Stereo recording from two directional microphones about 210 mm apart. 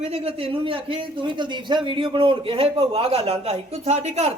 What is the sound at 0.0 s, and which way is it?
Speech, 30° right (ahead or behind).